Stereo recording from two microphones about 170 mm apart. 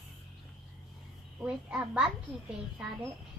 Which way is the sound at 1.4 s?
5° right (ahead or behind).